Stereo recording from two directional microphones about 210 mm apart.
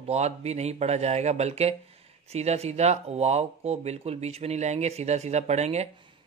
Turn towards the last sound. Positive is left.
turn(degrees=-30)  # may be behind; listen again after turning